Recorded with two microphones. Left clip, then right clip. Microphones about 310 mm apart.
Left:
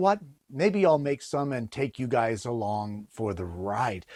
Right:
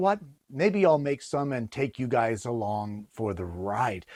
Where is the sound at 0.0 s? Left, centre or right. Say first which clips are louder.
Left 1 dB; centre.